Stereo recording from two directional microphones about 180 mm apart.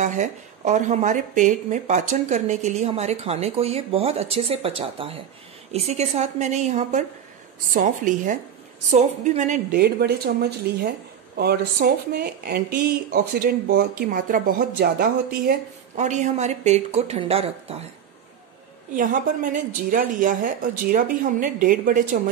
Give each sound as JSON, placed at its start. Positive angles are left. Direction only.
{"t": 0.0, "sound": "a woman's voice", "side_deg": -40}
{"t": 9.8, "sound": "speech", "side_deg": -60}
{"t": 16.0, "sound": "speech", "side_deg": -40}
{"t": 18.9, "sound": "a woman's voice", "side_deg": -50}